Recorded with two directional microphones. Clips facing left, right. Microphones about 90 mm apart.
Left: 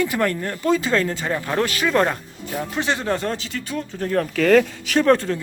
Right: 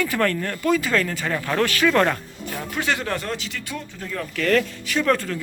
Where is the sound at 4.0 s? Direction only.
60° left (ahead or behind).